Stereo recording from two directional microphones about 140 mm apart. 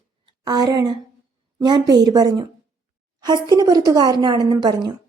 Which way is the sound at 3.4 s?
25° right (ahead or behind).